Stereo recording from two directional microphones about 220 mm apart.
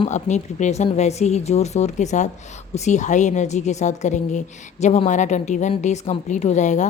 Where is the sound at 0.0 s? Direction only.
30° left (ahead or behind).